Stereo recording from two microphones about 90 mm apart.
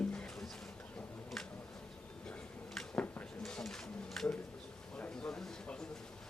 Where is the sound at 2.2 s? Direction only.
10° left (ahead or behind).